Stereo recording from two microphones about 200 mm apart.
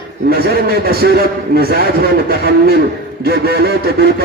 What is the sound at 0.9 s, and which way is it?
Speech, 50° right (ahead or behind).